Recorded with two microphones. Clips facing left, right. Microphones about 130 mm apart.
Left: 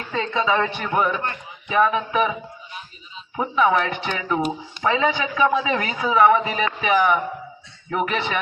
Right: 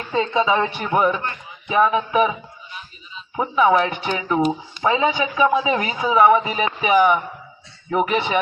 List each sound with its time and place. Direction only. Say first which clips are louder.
0.1 s speech: right 3 dB; 20° right (ahead or behind)
3.3 s speech: right 2 dB; 10° right (ahead or behind)